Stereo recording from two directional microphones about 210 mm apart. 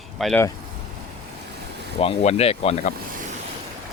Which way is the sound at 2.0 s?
30° left (ahead or behind).